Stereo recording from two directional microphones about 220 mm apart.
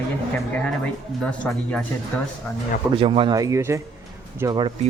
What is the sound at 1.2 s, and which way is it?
Speech, 5° left (ahead or behind).